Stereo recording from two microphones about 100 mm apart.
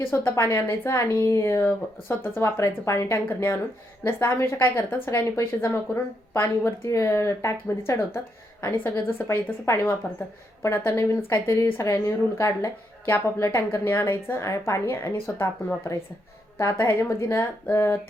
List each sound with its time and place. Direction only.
0.0 s speech: 25° left (ahead or behind)